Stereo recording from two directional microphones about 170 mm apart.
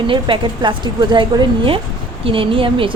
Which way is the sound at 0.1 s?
30° right (ahead or behind).